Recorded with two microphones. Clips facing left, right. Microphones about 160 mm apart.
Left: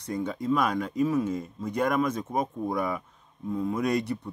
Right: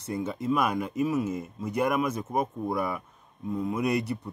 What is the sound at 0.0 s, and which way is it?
Speech, 5° right (ahead or behind).